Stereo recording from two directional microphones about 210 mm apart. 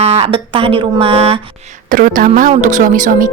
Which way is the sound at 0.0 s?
30° right (ahead or behind).